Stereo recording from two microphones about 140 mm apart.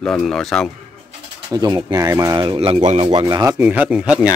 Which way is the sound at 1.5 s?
30° right (ahead or behind).